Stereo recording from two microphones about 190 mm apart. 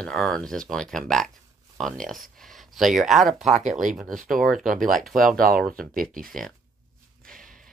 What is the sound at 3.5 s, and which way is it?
Speech, 40° right (ahead or behind).